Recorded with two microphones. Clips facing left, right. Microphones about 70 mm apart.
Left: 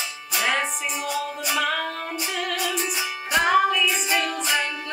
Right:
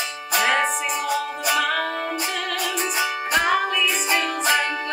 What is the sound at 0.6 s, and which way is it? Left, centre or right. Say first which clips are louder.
Music: right 5 dB; right.